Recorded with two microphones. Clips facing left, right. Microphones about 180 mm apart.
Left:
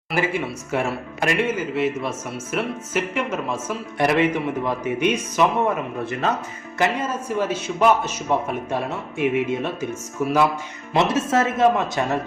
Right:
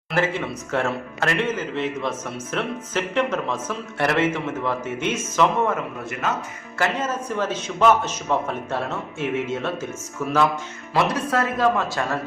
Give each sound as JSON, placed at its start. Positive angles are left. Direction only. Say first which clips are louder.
{"t": 0.1, "sound": "a man's voice", "louder": "even", "side_deg": 10}
{"t": 10.9, "sound": "speech", "louder": "left 2 dB", "side_deg": 25}